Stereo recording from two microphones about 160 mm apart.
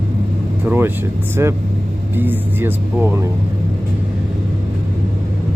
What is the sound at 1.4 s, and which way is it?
Speech, 20° right (ahead or behind).